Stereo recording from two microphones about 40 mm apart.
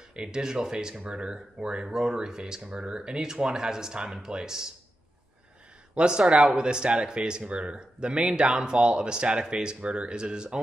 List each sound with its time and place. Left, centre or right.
0.1 s speech: centre
5.9 s speech: right